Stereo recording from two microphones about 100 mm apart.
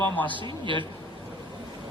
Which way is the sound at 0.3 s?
55° right (ahead or behind).